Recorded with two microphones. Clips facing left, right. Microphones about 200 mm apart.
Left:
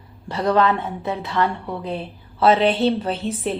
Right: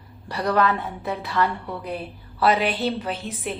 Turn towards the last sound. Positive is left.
turn(degrees=30)  # may be behind; listen again after turning